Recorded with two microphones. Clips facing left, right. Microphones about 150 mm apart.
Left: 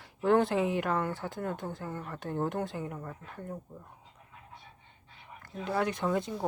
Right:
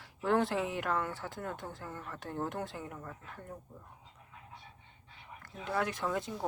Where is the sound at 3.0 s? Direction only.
15° left (ahead or behind).